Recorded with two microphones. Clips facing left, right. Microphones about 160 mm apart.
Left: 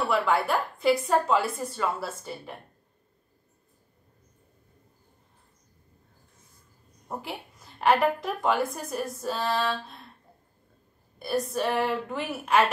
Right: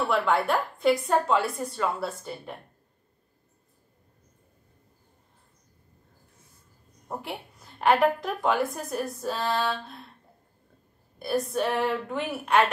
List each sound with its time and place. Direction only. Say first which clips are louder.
0.0 s a woman's voice: even; centre (ahead or behind)
7.1 s a woman's voice: right 1 dB; centre (ahead or behind)
11.1 s a woman's voice: right 1 dB; centre (ahead or behind)